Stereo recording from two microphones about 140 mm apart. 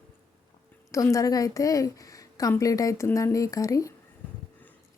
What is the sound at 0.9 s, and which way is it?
Speech, 20° left (ahead or behind).